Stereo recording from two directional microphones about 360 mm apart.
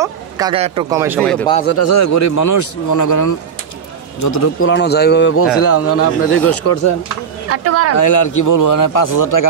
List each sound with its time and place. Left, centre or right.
0.0 s speech: centre
1.7 s a man's voice: left
4.6 s a man's voice: left
7.4 s speech: right
8.0 s a man's voice: left